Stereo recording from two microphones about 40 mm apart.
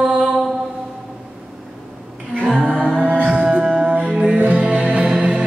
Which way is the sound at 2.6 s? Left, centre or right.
Right.